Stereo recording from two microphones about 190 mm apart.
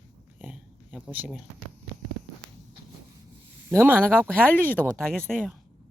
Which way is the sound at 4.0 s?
5° left (ahead or behind).